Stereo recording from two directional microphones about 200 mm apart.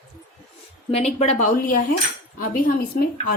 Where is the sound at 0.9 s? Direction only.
35° left (ahead or behind).